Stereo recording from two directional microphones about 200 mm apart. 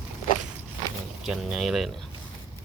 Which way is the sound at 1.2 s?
Centre (ahead or behind).